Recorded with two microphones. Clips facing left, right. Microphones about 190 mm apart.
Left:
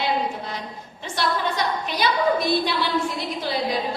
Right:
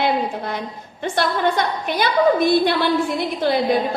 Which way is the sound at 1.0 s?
55° right (ahead or behind).